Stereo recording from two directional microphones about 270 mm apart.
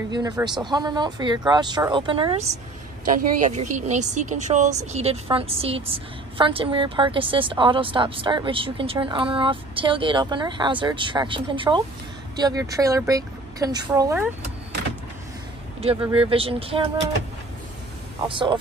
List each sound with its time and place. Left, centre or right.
0.1 s speech: centre
3.1 s speech: right; by 14.3 s centre
15.8 s speech: centre
18.3 s speech: centre